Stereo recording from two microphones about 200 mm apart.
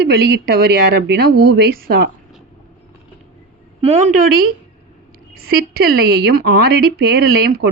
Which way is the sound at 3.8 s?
30° right (ahead or behind).